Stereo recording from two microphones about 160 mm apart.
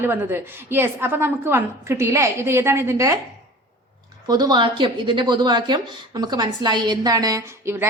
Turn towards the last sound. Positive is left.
turn(degrees=-15)  # may be behind; listen again after turning